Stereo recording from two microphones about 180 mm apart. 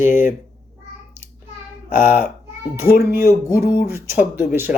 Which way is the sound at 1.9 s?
45° left (ahead or behind).